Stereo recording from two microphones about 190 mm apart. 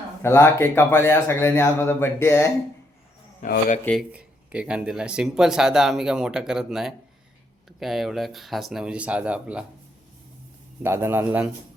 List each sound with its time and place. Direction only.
0.2 s speech: 15° left (ahead or behind)
3.4 s speech: 50° left (ahead or behind)
4.1 s speech: 5° right (ahead or behind)
10.8 s a man's voice: 10° right (ahead or behind)